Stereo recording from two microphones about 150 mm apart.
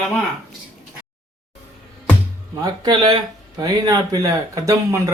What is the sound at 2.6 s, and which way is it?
Speech, 30° right (ahead or behind).